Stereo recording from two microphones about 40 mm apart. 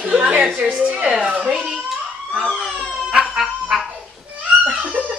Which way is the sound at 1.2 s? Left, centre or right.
Right.